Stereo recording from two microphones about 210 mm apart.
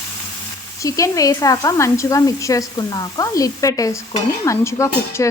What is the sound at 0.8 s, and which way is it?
Speech, 15° left (ahead or behind).